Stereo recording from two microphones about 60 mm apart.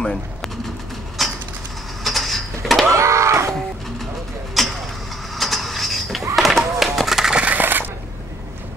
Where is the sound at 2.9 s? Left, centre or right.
Right.